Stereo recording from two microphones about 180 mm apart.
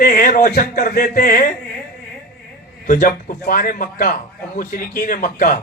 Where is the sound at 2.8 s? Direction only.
50° left (ahead or behind).